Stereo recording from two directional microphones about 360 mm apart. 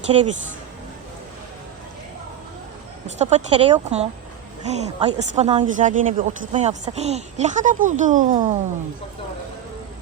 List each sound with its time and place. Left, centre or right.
3.2 s a woman's voice: centre